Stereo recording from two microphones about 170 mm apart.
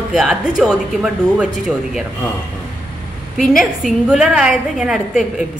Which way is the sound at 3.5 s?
Centre (ahead or behind).